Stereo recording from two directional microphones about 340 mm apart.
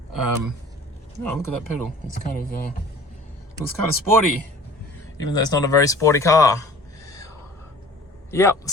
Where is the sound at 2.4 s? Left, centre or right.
Left.